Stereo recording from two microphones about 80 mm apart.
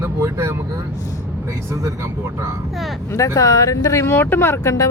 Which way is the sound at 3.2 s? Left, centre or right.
Left.